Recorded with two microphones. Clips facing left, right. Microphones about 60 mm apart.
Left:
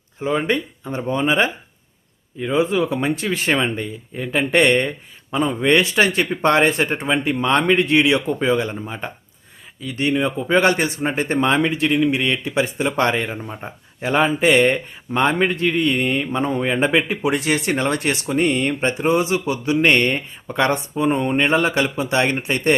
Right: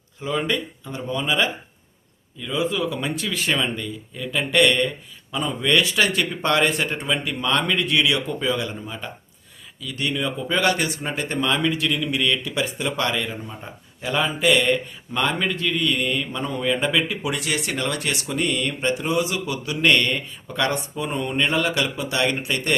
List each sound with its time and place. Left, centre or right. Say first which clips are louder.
0.2 s speech: left 4 dB; left